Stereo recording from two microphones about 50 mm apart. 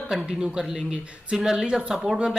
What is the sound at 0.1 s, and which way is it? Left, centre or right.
A woman's voice, centre.